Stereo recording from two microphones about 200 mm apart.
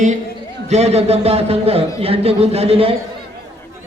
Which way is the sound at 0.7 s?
30° right (ahead or behind).